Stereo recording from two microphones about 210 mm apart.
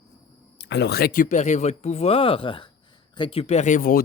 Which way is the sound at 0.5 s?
55° left (ahead or behind).